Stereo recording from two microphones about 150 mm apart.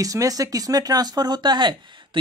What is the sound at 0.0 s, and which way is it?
Speech, 20° right (ahead or behind).